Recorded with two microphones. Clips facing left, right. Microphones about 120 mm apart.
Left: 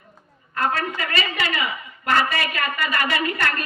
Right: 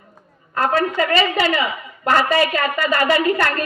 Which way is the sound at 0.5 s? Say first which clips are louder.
Right 6 dB; 30° right (ahead or behind).